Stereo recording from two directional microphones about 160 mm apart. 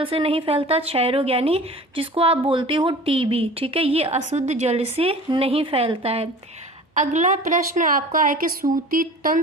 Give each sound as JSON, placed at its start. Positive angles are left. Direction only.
{"t": 0.0, "sound": "a woman's voice", "side_deg": -35}
{"t": 6.9, "sound": "a woman's voice", "side_deg": -50}